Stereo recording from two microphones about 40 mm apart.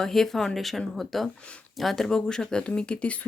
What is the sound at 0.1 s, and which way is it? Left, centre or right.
Speech, centre.